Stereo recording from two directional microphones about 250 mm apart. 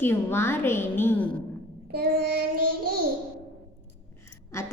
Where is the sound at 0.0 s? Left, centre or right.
Centre.